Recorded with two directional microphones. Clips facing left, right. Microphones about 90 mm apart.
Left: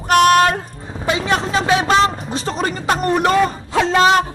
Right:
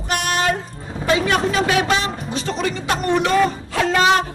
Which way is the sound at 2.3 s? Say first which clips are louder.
Left 1 dB; 35° left (ahead or behind).